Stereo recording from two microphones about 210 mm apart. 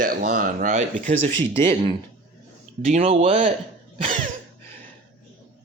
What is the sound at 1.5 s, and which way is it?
Speech, 25° right (ahead or behind).